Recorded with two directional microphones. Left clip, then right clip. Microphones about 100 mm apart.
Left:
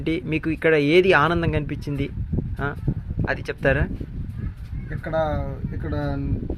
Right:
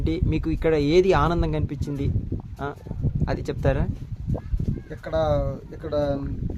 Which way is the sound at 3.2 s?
Centre (ahead or behind).